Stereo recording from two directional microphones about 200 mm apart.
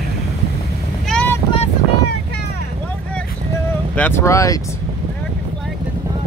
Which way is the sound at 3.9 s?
10° left (ahead or behind).